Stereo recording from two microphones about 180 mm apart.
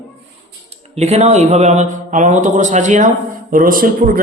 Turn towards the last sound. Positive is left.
turn(degrees=-50)  # may be behind; listen again after turning